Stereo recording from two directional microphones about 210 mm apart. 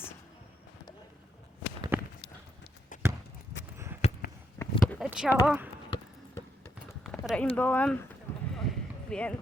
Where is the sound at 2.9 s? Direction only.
40° left (ahead or behind).